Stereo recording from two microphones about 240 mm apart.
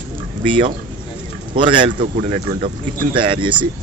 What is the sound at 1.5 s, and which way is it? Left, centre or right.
Speech, right.